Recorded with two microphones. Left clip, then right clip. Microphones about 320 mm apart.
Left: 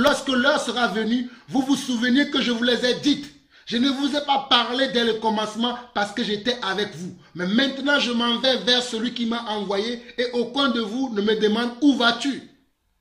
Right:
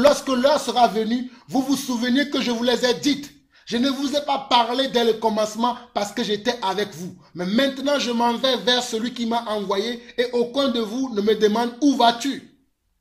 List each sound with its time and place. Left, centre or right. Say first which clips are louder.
0.0 s a man's voice: right 2 dB; centre